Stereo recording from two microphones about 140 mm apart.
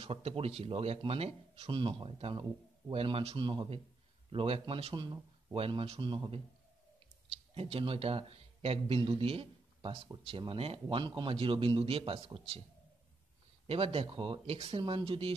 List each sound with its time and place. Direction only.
0.0 s speech: 40° right (ahead or behind)
7.5 s speech: 40° right (ahead or behind)
13.7 s speech: 40° right (ahead or behind)